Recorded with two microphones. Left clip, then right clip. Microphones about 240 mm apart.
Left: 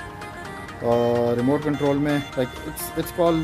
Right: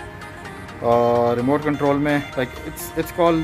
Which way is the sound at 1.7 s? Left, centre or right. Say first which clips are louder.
Right 3 dB; left.